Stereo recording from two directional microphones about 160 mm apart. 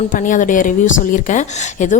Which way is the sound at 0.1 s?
55° left (ahead or behind).